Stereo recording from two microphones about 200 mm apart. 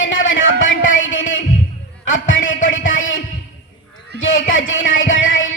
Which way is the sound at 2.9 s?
75° left (ahead or behind).